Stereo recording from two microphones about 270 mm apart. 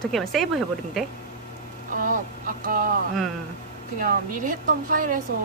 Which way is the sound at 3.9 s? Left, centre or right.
Right.